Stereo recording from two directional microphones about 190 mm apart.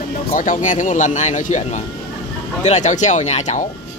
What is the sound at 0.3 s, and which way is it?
A man's voice, 45° left (ahead or behind).